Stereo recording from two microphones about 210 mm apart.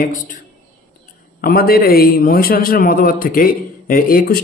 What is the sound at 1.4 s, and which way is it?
A man's voice, 45° left (ahead or behind).